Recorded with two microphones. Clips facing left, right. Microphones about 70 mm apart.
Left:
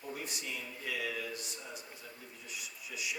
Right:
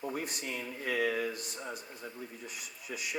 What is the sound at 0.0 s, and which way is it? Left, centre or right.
A man's voice, right.